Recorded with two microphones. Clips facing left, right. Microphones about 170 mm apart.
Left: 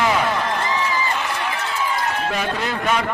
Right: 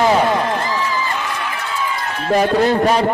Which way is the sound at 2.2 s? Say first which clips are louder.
Right 9 dB; 40° right (ahead or behind).